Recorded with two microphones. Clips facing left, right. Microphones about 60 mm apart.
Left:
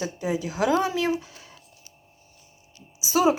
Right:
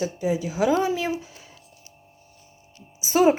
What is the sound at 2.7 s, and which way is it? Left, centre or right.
Music, right.